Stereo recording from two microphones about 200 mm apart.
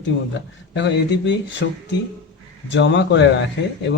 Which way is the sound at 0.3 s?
65° left (ahead or behind).